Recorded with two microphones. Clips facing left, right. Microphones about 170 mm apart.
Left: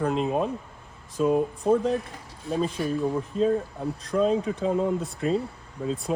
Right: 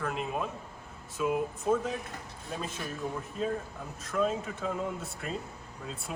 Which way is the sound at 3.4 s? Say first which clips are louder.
Left 10 dB; 35° left (ahead or behind).